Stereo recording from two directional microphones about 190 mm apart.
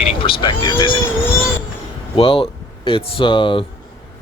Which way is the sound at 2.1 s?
30° left (ahead or behind).